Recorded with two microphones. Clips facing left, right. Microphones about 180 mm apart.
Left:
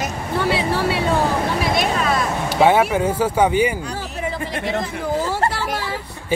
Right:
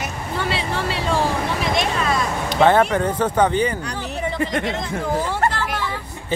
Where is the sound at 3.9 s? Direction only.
5° left (ahead or behind).